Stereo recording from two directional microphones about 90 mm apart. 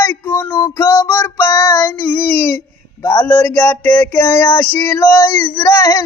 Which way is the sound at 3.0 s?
30° left (ahead or behind).